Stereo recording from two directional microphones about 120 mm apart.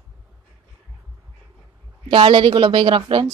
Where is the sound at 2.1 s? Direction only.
45° right (ahead or behind).